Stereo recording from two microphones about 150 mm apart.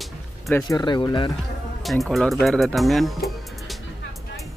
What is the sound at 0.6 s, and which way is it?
Speech, 30° left (ahead or behind).